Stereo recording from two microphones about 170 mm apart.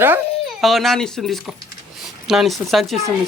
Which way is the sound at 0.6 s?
Centre (ahead or behind).